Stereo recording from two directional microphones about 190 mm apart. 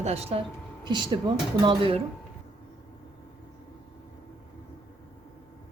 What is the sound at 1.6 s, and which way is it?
Speech, 25° right (ahead or behind).